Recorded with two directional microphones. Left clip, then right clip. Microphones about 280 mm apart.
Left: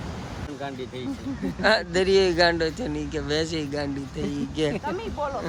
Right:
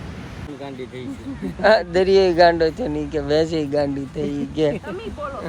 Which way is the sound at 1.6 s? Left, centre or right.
Centre.